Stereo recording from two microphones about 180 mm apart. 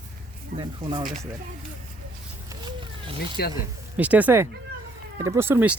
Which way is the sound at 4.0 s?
10° right (ahead or behind).